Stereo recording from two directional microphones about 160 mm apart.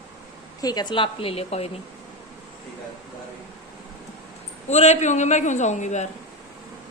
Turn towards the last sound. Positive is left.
turn(degrees=45)  # may be behind; listen again after turning